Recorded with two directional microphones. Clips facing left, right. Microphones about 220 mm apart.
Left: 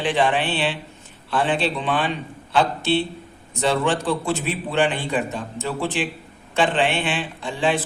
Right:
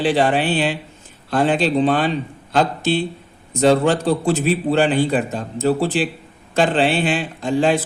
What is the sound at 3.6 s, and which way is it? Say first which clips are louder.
A man's voice: right 6 dB; 40° right (ahead or behind).